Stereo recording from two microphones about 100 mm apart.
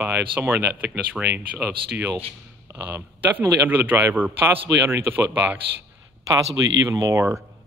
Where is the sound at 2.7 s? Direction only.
30° right (ahead or behind).